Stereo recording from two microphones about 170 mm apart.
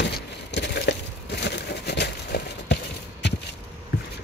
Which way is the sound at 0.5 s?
80° left.